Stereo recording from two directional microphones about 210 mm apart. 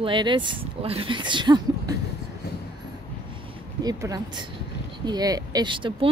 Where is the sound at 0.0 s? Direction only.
20° right (ahead or behind).